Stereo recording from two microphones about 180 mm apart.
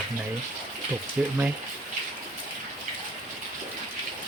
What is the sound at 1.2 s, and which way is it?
Speech, 10° right (ahead or behind).